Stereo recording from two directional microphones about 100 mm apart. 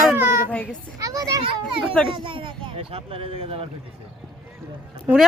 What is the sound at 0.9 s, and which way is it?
Speech, 35° right (ahead or behind).